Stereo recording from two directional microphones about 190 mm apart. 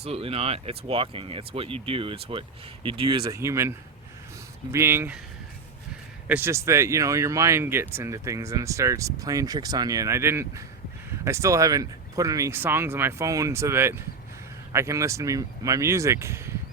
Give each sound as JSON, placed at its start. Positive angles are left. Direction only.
{"t": 0.0, "sound": "speech", "side_deg": -30}
{"t": 6.2, "sound": "speech", "side_deg": -10}